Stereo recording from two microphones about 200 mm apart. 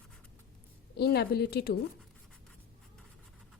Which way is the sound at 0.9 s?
55° left (ahead or behind).